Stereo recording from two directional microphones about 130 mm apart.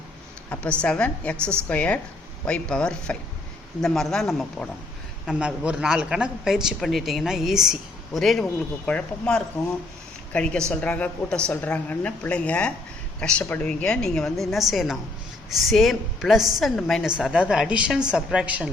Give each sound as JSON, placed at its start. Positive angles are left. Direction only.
{"t": 0.5, "sound": "a woman's voice", "side_deg": 10}